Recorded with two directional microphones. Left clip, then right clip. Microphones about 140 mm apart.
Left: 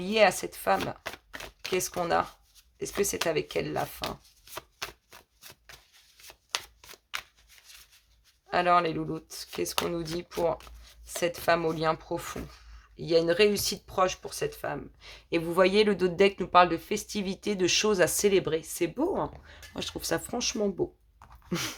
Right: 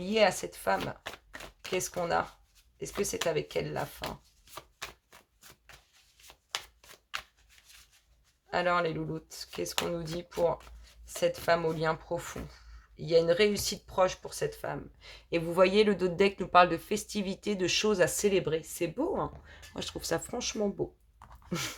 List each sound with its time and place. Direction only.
0.0 s speech: 40° left (ahead or behind)
1.0 s shuffling cards: 25° left (ahead or behind)
1.7 s speech: 40° left (ahead or behind)
4.5 s chopping: 25° left (ahead or behind)
6.2 s shuffling cards: 25° left (ahead or behind)
8.4 s speech: 45° left (ahead or behind)